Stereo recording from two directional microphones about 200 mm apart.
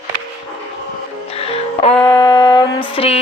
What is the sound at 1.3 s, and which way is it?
Music, 30° left (ahead or behind).